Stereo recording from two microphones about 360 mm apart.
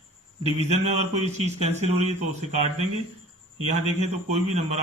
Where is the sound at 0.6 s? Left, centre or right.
Centre.